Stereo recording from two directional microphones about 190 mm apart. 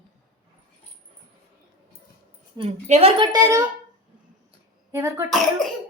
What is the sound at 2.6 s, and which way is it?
Speech, 35° right (ahead or behind).